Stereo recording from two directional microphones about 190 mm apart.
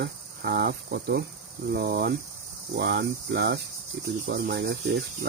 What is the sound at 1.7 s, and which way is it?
Cricket, 55° right (ahead or behind).